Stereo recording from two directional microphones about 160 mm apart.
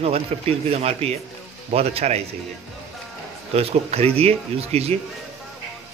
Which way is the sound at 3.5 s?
40° right (ahead or behind).